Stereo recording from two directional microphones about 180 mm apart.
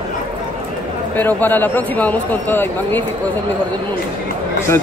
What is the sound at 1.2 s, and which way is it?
Speech, 10° left (ahead or behind).